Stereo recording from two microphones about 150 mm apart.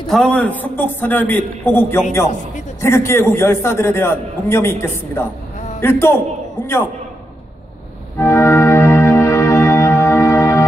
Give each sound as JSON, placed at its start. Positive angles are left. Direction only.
{"t": 0.0, "sound": "a man's voice", "side_deg": 5}
{"t": 8.2, "sound": "music", "side_deg": 15}